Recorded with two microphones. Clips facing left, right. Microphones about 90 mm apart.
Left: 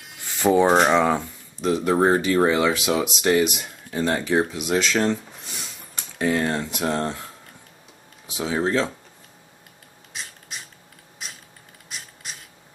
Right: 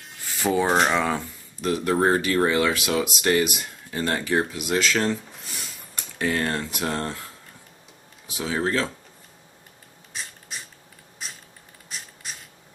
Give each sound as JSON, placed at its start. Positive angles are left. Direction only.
{"t": 0.7, "sound": "speech", "side_deg": 5}
{"t": 6.1, "sound": "speech", "side_deg": 15}
{"t": 8.4, "sound": "speech", "side_deg": 10}
{"t": 11.9, "sound": "a sound", "side_deg": 5}